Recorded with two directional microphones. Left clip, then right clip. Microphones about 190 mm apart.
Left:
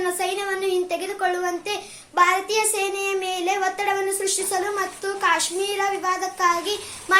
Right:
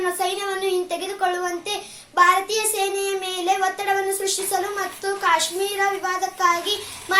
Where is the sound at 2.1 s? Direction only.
20° left (ahead or behind).